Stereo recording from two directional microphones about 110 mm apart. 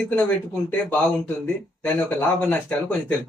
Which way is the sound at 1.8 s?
15° left (ahead or behind).